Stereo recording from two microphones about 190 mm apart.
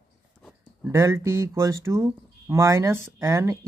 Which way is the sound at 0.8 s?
15° right (ahead or behind).